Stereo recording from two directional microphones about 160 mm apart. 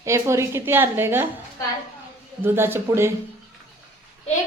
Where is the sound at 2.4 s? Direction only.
15° right (ahead or behind).